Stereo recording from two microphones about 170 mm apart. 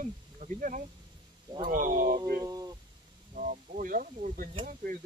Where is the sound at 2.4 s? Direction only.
20° right (ahead or behind).